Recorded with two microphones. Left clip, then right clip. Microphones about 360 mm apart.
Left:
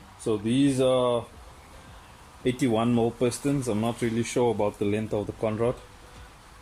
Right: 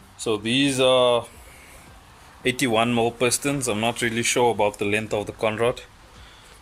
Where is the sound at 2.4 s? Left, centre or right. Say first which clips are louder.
Right 4 dB; right.